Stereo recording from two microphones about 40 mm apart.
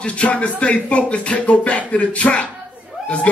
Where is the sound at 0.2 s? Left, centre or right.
Left.